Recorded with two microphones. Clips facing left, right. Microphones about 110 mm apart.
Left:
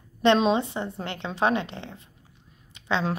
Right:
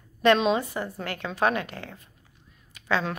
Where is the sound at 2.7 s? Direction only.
25° left (ahead or behind).